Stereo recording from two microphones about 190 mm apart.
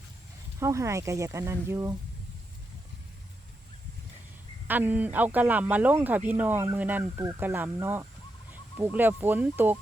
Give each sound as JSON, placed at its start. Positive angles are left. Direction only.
{"t": 0.6, "sound": "speech", "side_deg": -15}
{"t": 4.7, "sound": "speech", "side_deg": -10}